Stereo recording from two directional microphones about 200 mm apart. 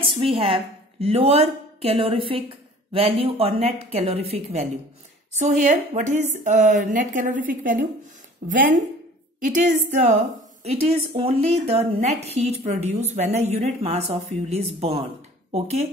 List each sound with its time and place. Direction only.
0.2 s a woman's voice: 30° right (ahead or behind); by 8.6 s 50° right (ahead or behind)
9.4 s a woman's voice: 40° right (ahead or behind)